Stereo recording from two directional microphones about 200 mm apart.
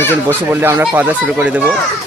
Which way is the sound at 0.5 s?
10° right (ahead or behind).